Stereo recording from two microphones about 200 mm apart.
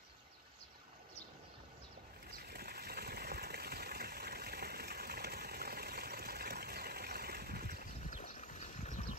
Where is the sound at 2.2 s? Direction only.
50° right (ahead or behind).